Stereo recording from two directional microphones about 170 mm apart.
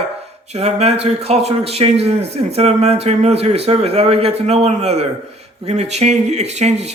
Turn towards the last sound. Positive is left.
turn(degrees=-40)  # may be behind; listen again after turning